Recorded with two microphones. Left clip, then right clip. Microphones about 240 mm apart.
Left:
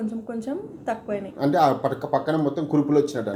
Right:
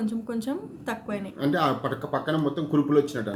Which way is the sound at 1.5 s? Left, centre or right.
Centre.